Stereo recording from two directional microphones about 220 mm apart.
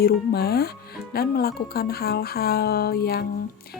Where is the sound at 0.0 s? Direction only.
45° left (ahead or behind).